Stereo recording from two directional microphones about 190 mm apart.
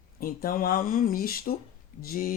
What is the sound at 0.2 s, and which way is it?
Speech, 50° left (ahead or behind).